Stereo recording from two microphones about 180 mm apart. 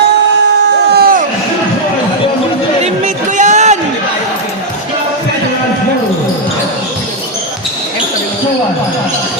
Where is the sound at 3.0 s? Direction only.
40° right (ahead or behind).